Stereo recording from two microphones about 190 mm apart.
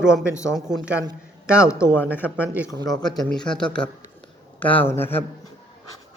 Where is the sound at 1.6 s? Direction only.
10° left (ahead or behind).